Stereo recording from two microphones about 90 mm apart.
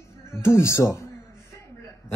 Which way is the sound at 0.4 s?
30° left (ahead or behind).